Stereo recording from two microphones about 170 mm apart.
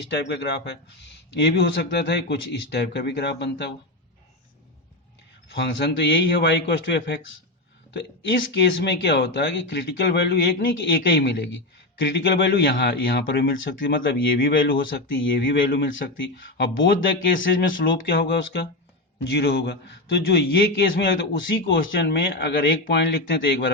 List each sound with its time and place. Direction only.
0.1 s speech: 85° left
5.5 s speech: 75° left (ahead or behind)